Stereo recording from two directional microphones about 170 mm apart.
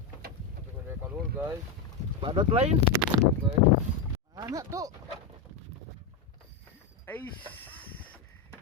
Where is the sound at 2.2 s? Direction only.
30° right (ahead or behind).